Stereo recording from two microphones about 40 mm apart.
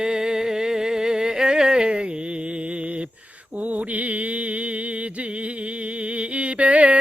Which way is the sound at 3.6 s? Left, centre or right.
Right.